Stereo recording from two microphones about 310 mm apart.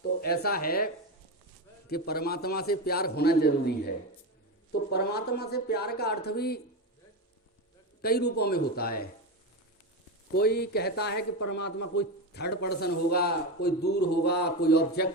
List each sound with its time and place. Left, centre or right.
0.2 s a man's voice: left
1.9 s a man's voice: left
8.0 s a man's voice: left
10.3 s a man's voice: left